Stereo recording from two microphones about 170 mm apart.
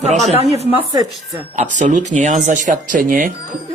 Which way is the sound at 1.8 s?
45° right (ahead or behind).